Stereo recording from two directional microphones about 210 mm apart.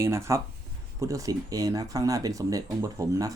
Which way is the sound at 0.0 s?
15° right (ahead or behind).